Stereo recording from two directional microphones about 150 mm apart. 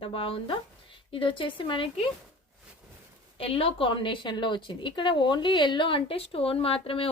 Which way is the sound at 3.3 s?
40° left (ahead or behind).